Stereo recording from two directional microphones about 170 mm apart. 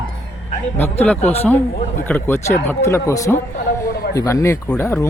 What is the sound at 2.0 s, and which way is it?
Speech, 10° left (ahead or behind).